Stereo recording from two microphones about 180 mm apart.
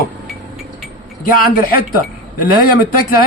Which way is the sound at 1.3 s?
55° left (ahead or behind).